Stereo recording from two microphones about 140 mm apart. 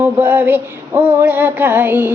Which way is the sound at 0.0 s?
10° right (ahead or behind).